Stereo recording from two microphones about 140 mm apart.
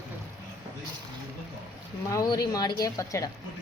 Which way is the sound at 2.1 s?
25° left (ahead or behind).